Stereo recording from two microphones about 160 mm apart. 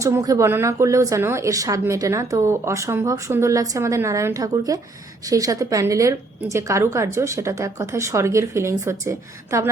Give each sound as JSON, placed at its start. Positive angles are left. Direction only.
{"t": 0.0, "sound": "a woman's voice", "side_deg": -20}